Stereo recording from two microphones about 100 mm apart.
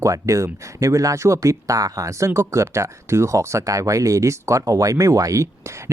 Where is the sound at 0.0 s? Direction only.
30° right (ahead or behind).